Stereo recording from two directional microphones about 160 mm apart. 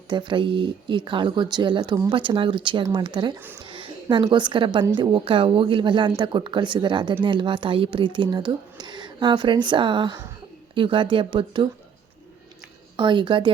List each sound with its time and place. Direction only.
0.1 s speech: 30° right (ahead or behind)
13.0 s speech: 30° right (ahead or behind)